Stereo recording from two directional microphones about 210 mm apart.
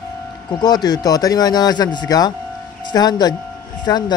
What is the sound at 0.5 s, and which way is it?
Speech, 20° left (ahead or behind).